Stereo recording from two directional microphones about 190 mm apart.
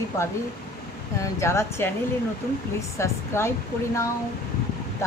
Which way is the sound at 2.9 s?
15° left (ahead or behind).